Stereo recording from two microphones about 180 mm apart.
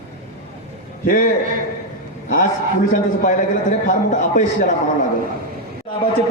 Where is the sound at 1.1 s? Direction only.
50° left (ahead or behind).